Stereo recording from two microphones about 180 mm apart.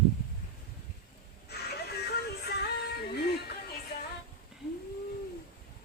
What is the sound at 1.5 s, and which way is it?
Music, 65° left (ahead or behind).